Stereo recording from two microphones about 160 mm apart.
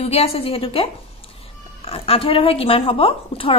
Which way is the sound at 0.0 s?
40° left (ahead or behind).